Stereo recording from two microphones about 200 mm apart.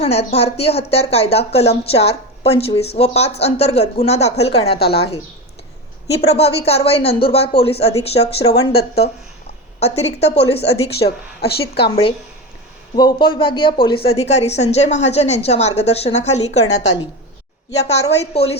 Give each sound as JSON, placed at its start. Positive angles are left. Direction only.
{"t": 0.0, "sound": "speech", "side_deg": 30}
{"t": 4.8, "sound": "speech", "side_deg": 55}
{"t": 6.2, "sound": "speech", "side_deg": 30}
{"t": 8.7, "sound": "speech", "side_deg": 55}
{"t": 9.8, "sound": "speech", "side_deg": 30}
{"t": 11.3, "sound": "speech", "side_deg": 50}
{"t": 13.0, "sound": "speech", "side_deg": 25}
{"t": 18.3, "sound": "speech", "side_deg": 30}